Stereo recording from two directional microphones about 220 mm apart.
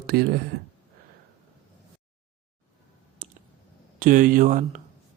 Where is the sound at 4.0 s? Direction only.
40° right (ahead or behind).